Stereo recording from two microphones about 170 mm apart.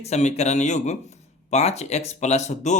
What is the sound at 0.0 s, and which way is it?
Speech, 40° left (ahead or behind).